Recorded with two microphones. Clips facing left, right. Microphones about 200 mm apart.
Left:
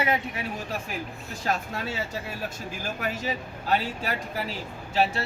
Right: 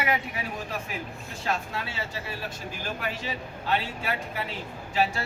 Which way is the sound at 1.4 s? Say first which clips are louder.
Left 2 dB; 45° left (ahead or behind).